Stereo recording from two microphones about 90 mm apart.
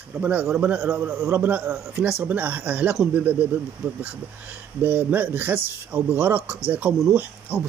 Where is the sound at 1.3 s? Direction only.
20° right (ahead or behind).